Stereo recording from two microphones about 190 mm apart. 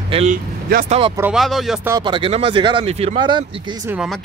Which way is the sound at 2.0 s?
25° right (ahead or behind).